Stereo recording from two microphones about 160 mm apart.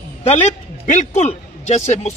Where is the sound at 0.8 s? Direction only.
50° left (ahead or behind).